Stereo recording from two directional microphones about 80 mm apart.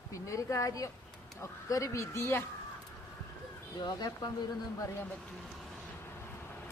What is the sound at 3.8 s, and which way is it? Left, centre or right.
Speech, left.